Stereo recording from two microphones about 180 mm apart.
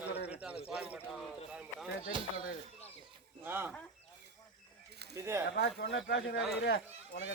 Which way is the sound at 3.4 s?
10° right (ahead or behind).